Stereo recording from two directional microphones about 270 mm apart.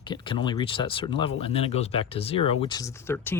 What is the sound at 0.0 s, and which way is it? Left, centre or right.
Speech, centre.